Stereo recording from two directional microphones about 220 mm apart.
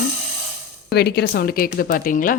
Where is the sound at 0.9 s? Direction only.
45° left (ahead or behind).